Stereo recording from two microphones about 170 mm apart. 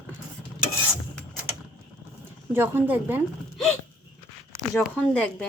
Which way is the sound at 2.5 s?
15° right (ahead or behind).